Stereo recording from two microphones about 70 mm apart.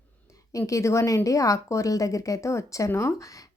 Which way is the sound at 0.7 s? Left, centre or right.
Left.